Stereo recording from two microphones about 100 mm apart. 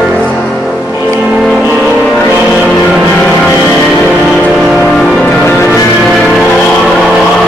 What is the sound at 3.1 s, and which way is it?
Vehicle, 15° left (ahead or behind).